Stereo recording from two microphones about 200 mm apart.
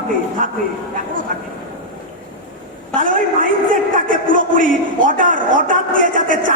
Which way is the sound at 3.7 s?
40° right (ahead or behind).